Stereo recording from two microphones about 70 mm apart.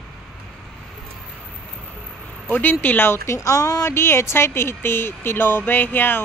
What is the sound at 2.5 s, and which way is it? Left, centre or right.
Speech, left.